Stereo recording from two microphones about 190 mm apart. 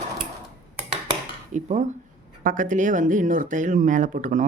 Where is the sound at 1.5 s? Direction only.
40° right (ahead or behind).